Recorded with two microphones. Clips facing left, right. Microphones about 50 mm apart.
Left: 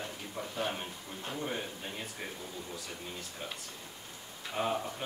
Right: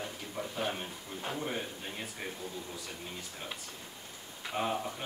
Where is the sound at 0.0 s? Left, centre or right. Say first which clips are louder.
Right 1 dB; centre.